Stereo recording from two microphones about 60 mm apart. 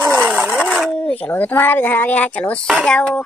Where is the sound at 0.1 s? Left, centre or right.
Right.